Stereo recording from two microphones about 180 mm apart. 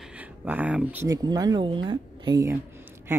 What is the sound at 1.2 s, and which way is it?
Speech, 25° right (ahead or behind).